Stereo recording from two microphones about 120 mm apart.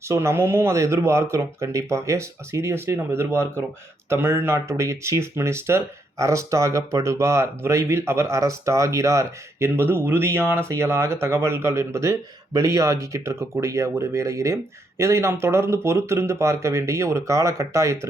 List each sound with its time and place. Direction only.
0.1 s speech: 20° right (ahead or behind)